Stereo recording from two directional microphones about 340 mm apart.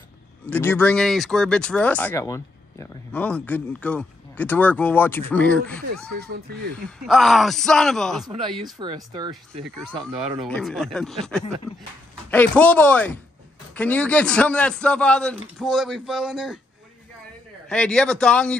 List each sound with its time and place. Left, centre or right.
0.5 s speech: centre
6.1 s speech: right
7.1 s speech: centre
8.7 s speech: centre
10.5 s speech: centre
17.6 s speech: centre